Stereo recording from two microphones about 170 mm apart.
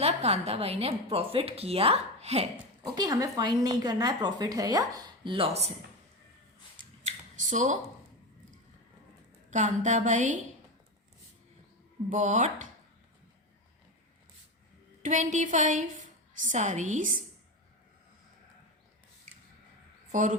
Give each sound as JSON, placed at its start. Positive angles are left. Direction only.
{"t": 0.0, "sound": "a woman's voice", "side_deg": -35}
{"t": 2.8, "sound": "a woman's voice", "side_deg": -25}
{"t": 7.0, "sound": "a sound", "side_deg": -45}
{"t": 9.5, "sound": "a woman's voice", "side_deg": -45}
{"t": 12.0, "sound": "a woman's voice", "side_deg": -45}
{"t": 15.0, "sound": "a woman's voice", "side_deg": -45}
{"t": 20.1, "sound": "speech", "side_deg": -45}